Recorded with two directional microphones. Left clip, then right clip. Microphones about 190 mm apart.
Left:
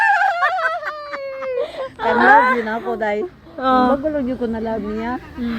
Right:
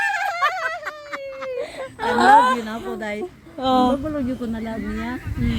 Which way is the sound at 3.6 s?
40° right (ahead or behind).